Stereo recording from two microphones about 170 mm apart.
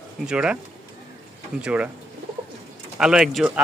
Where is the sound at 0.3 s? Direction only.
5° right (ahead or behind).